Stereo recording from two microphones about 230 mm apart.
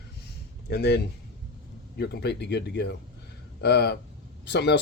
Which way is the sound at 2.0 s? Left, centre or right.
Left.